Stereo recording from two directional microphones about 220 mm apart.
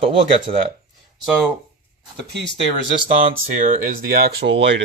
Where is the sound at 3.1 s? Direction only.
35° right (ahead or behind); by 4.8 s 55° right (ahead or behind).